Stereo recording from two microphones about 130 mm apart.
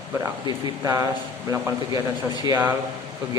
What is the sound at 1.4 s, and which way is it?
Speech, 20° right (ahead or behind).